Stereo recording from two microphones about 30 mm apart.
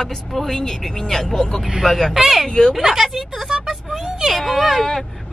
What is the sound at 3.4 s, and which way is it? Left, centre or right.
Vehicle, right.